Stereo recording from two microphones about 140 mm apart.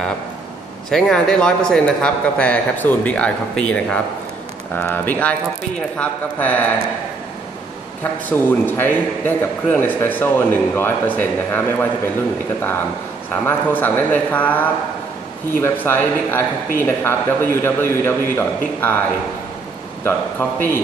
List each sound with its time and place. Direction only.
0.8 s a man's voice: 5° left (ahead or behind)
8.0 s a man's voice: 15° left (ahead or behind)
13.3 s a man's voice: 15° left (ahead or behind)
20.0 s a man's voice: 15° left (ahead or behind)